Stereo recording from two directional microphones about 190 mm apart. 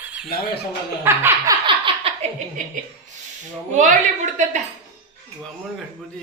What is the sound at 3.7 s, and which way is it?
Speech, 40° right (ahead or behind).